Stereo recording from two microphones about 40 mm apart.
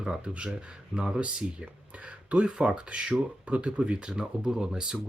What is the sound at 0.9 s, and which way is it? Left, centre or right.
Speech, right.